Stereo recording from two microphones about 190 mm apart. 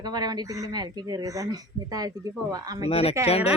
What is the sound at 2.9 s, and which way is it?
Speech, 30° left (ahead or behind).